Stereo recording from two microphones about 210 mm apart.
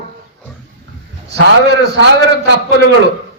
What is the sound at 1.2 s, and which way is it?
A man's voice, 50° right (ahead or behind).